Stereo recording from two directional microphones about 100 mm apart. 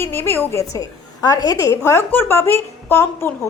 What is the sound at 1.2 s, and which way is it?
A woman's voice, 40° left (ahead or behind).